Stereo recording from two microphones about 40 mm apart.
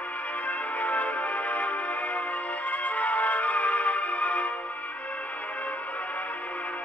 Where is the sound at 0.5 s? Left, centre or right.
Left.